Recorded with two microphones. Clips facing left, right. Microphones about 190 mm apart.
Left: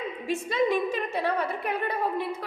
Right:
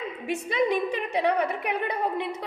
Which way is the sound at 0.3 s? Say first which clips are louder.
Even; 15° right (ahead or behind).